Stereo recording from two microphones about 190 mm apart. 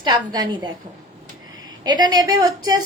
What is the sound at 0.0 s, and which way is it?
Speech, 20° right (ahead or behind).